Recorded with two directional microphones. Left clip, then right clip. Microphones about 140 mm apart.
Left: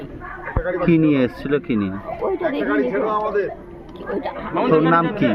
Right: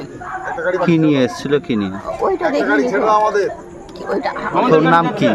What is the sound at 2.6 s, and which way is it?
Speech, 70° right (ahead or behind).